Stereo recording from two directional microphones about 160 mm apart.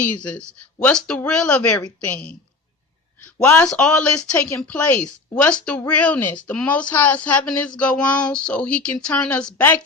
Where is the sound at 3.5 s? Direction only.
5° left (ahead or behind).